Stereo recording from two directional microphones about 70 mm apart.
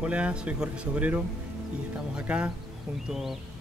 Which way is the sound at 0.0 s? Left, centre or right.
Centre.